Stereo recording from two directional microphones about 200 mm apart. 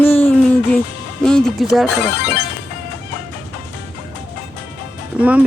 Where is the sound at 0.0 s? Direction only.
10° left (ahead or behind).